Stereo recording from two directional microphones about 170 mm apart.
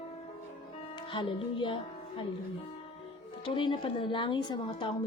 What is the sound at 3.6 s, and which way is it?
Speech, 30° left (ahead or behind).